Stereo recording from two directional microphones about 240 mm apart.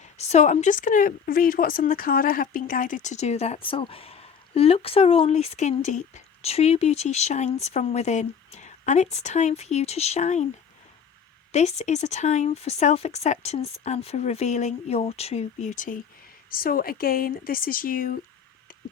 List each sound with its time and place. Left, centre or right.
0.0 s speech: left
11.5 s speech: left